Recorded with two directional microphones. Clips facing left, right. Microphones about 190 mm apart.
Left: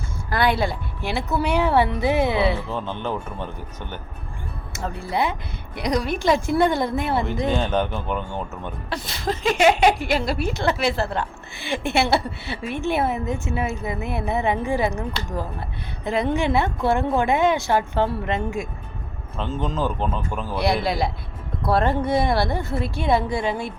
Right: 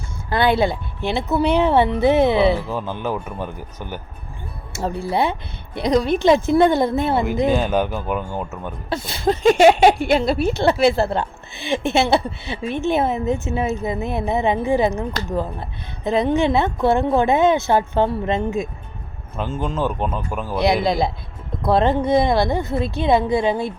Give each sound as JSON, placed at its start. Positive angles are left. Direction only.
{"t": 0.3, "sound": "speech", "side_deg": -25}
{"t": 2.6, "sound": "speech", "side_deg": -10}
{"t": 4.8, "sound": "speech", "side_deg": -30}
{"t": 7.3, "sound": "speech", "side_deg": -5}
{"t": 8.9, "sound": "speech", "side_deg": -30}
{"t": 9.4, "sound": "a sound", "side_deg": -40}
{"t": 10.5, "sound": "speech", "side_deg": -30}
{"t": 16.0, "sound": "speech", "side_deg": -20}
{"t": 19.4, "sound": "speech", "side_deg": 0}
{"t": 21.6, "sound": "speech", "side_deg": -20}